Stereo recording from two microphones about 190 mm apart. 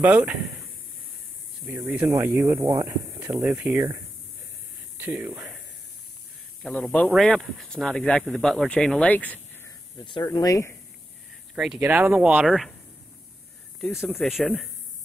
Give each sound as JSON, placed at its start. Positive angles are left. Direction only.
{"t": 0.0, "sound": "speech", "side_deg": -10}
{"t": 1.9, "sound": "speech", "side_deg": -10}
{"t": 4.9, "sound": "speech", "side_deg": -10}
{"t": 6.6, "sound": "speech", "side_deg": 5}
{"t": 10.0, "sound": "speech", "side_deg": 25}
{"t": 11.5, "sound": "speech", "side_deg": -5}
{"t": 14.0, "sound": "speech", "side_deg": 0}